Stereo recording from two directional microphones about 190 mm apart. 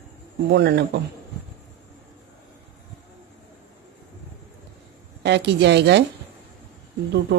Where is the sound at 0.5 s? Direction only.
60° right (ahead or behind).